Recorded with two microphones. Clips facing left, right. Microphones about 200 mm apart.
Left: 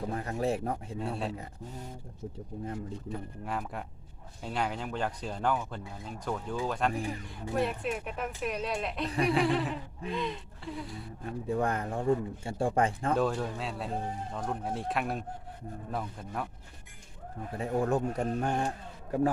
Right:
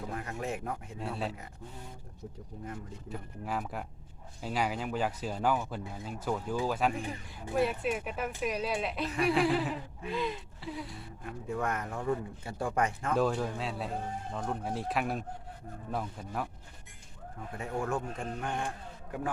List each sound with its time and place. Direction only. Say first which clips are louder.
0.1 s speech: left 6 dB; 35° left (ahead or behind)
0.9 s speech: left 2 dB; centre (ahead or behind)
3.1 s speech: right 2 dB; centre (ahead or behind)
11.3 s speech: left 4 dB; 35° left (ahead or behind)
13.1 s speech: right 4 dB; centre (ahead or behind)
17.6 s speech: left 5 dB; 35° left (ahead or behind)